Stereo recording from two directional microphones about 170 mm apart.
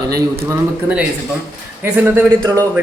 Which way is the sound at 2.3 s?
20° right (ahead or behind).